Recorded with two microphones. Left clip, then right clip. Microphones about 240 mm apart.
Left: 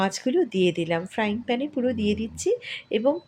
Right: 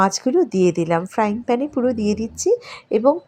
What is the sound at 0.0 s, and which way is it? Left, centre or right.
A woman's voice, centre.